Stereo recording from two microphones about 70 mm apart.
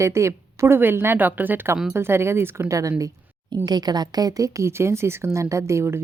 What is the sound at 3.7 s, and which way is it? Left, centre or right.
A woman's voice, right.